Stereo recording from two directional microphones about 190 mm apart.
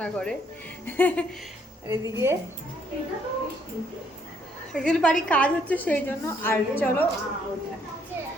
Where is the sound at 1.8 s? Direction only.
15° right (ahead or behind).